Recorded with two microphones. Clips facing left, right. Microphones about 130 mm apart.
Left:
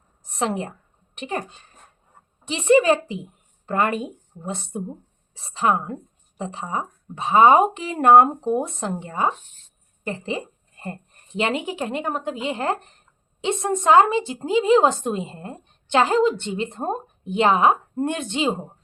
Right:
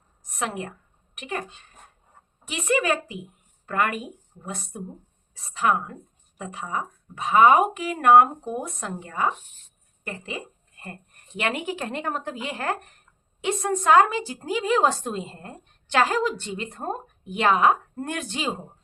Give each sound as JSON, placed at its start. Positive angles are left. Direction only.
{"t": 0.3, "sound": "a woman's voice", "side_deg": 30}